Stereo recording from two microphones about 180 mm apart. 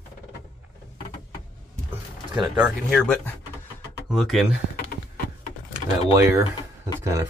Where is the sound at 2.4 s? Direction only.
Centre (ahead or behind).